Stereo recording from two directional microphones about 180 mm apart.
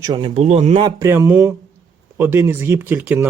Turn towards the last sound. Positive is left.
turn(degrees=-10)  # may be behind; listen again after turning